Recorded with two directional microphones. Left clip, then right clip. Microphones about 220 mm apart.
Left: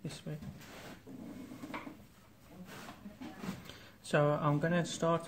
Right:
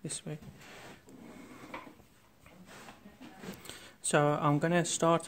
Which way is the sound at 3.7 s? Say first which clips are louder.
Right 4 dB; 40° right (ahead or behind).